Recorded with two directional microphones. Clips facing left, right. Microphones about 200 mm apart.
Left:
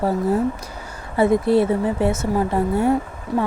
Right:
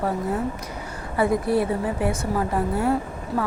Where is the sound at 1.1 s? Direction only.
25° left (ahead or behind).